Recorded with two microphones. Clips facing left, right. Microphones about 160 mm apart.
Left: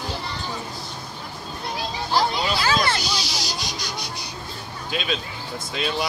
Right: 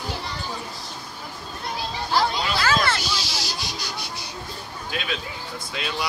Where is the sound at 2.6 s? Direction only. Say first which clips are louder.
Even; 15° left (ahead or behind).